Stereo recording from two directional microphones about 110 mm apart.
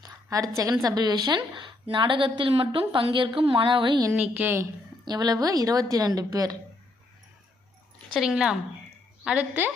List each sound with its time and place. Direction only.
0.0 s a woman's voice: 35° right (ahead or behind)
4.1 s a woman's voice: 10° right (ahead or behind)
5.0 s a woman's voice: 40° right (ahead or behind)
8.1 s a woman's voice: 5° right (ahead or behind)